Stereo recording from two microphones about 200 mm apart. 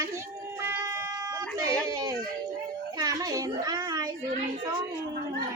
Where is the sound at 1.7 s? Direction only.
20° right (ahead or behind).